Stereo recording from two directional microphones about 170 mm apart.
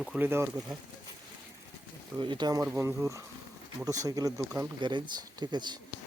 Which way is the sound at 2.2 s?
25° right (ahead or behind).